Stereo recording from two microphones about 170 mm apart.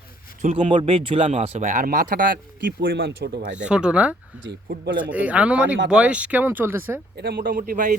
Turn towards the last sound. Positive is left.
turn(degrees=-55)  # may be behind; listen again after turning